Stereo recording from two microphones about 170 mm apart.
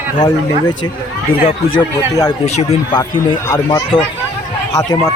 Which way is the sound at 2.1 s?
20° left (ahead or behind).